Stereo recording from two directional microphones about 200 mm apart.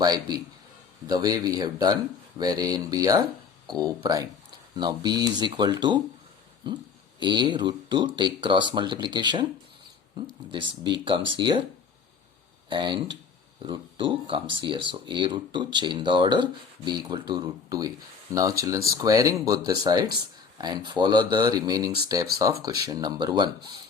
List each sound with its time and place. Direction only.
0.0 s speech: 20° right (ahead or behind)
7.2 s speech: 20° right (ahead or behind)
12.6 s speech: 25° right (ahead or behind)